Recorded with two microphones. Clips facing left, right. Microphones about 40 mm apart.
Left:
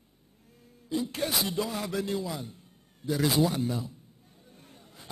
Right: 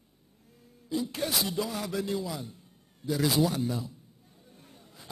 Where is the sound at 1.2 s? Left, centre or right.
Centre.